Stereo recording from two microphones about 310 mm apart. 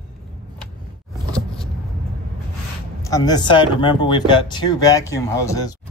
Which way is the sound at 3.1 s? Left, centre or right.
Centre.